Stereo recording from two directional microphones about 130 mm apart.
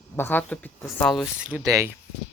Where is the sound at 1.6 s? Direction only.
25° right (ahead or behind).